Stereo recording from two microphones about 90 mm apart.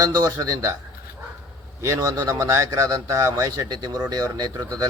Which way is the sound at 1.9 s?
35° right (ahead or behind).